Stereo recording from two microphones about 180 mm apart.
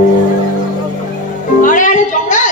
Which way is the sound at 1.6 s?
45° left (ahead or behind).